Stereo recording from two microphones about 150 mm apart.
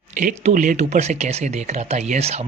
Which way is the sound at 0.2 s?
60° right (ahead or behind).